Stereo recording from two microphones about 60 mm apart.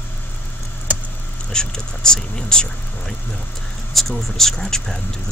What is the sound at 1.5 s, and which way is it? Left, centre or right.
Speech, centre.